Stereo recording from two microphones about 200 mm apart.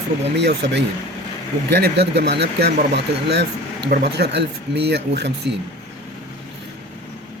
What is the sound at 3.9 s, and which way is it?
Speech, 55° right (ahead or behind).